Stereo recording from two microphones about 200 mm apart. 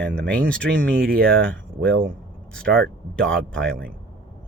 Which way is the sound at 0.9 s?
45° right (ahead or behind).